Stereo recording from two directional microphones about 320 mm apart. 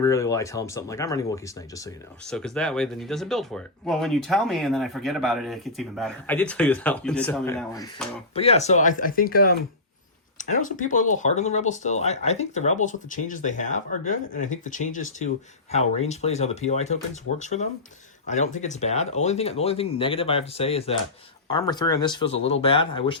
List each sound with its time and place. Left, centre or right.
0.0 s speech: centre
8.4 s speech: centre